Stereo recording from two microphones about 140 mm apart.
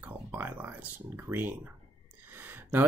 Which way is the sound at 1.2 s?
15° right (ahead or behind).